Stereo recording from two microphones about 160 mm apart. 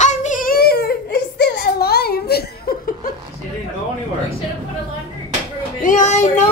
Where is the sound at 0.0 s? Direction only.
45° left (ahead or behind); by 3.1 s 65° left (ahead or behind).